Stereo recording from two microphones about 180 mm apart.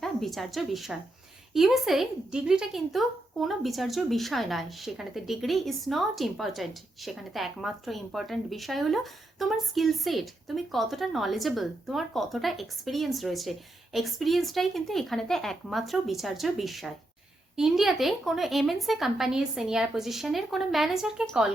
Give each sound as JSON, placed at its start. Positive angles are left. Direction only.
{"t": 0.0, "sound": "a woman's voice", "side_deg": 0}